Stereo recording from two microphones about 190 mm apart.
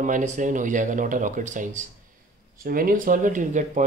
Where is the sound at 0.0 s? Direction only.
40° right (ahead or behind).